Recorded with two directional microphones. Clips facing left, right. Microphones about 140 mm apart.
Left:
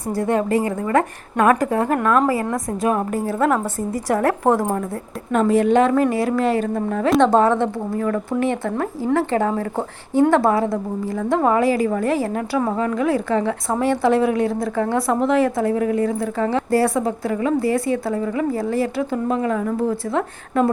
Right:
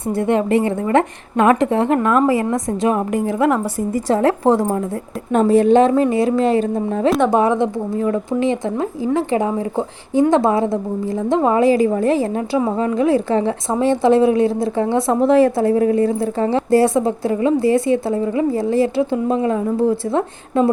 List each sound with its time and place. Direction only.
0.1 s a woman's voice: 20° right (ahead or behind)
5.3 s a woman's voice: 30° right (ahead or behind)
7.1 s a woman's voice: 10° right (ahead or behind); by 20.7 s 25° right (ahead or behind)